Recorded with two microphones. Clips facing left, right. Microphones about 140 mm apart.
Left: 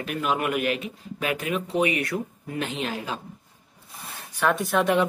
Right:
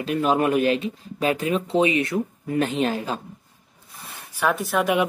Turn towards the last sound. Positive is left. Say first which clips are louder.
# even
turn(degrees=-5)  # may be behind; listen again after turning